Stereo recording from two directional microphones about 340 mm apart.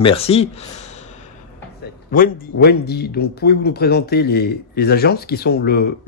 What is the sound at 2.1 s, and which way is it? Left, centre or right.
Speech, left.